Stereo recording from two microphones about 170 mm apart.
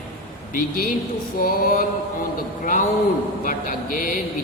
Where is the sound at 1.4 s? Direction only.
60° left (ahead or behind).